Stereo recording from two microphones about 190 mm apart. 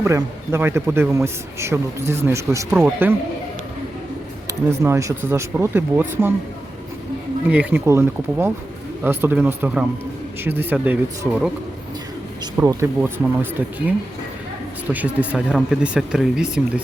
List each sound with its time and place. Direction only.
0.0 s a man's voice: 15° right (ahead or behind)
4.8 s a man's voice: 15° right (ahead or behind)
7.5 s a man's voice: 10° right (ahead or behind)
12.5 s a man's voice: 10° right (ahead or behind)
14.9 s speech: 5° right (ahead or behind)